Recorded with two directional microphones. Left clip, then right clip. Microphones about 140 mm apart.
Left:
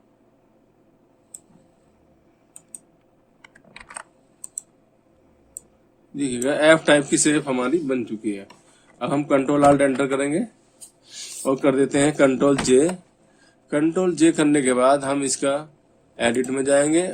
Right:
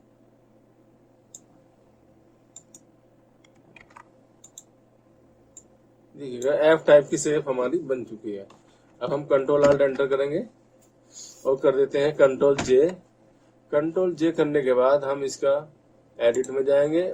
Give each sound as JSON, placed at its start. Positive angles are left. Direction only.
{"t": 6.1, "sound": "a man's voice", "side_deg": 55}
{"t": 9.0, "sound": "a man's voice", "side_deg": 55}
{"t": 11.5, "sound": "a man's voice", "side_deg": 50}